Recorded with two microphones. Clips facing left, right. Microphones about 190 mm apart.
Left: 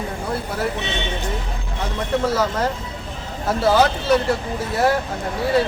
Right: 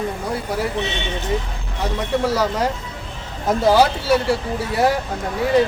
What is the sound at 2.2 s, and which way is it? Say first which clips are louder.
Speech: right 1 dB; 10° right (ahead or behind).